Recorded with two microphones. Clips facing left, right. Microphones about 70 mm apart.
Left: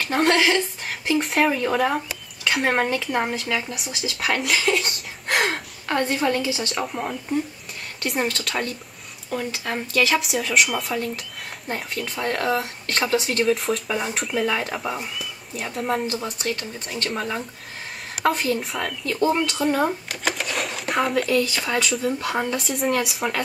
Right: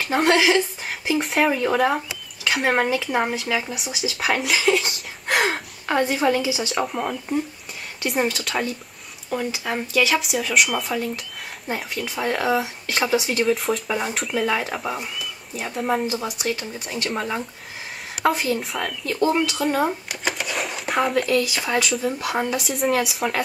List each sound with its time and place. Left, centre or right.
0.0 s speech: centre